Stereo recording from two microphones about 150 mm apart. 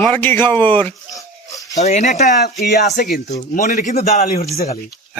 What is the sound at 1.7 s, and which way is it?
Speech, 50° left (ahead or behind).